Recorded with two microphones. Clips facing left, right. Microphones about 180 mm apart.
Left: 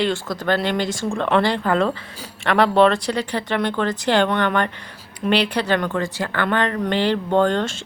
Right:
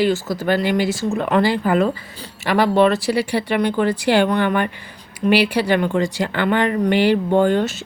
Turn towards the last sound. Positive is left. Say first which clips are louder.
# right 2 dB
turn(degrees=-5)  # may be behind; listen again after turning